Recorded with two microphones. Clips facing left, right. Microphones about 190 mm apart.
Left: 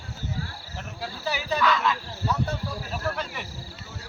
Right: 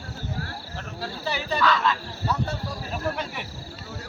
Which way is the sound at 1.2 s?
10° left (ahead or behind).